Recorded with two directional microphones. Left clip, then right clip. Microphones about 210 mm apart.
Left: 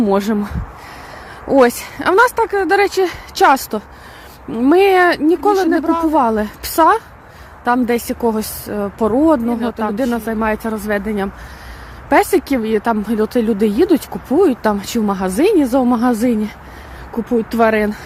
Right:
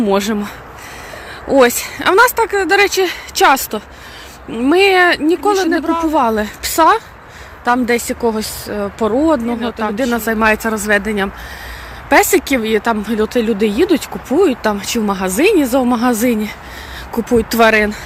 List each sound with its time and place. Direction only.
0.0 s speech: 20° left (ahead or behind)
10.2 s speech: 5° left (ahead or behind)